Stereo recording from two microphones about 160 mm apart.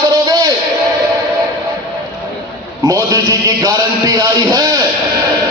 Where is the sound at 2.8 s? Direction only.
20° right (ahead or behind).